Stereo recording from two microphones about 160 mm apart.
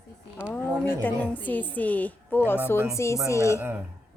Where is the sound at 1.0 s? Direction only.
10° left (ahead or behind).